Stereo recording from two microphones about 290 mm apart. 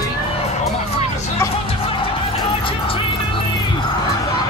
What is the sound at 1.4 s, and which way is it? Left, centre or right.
Music, centre.